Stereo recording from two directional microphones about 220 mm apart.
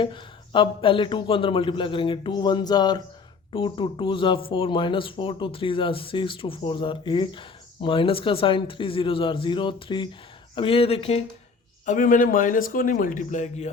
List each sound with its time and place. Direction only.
0.0 s speech: 20° left (ahead or behind)